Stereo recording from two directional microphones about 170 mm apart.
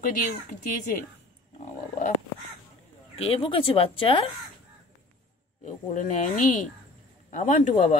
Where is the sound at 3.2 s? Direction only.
35° left (ahead or behind).